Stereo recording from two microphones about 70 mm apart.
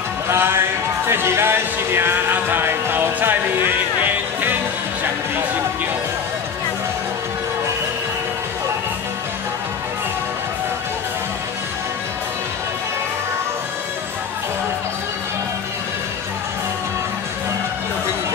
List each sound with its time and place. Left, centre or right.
0.3 s music: right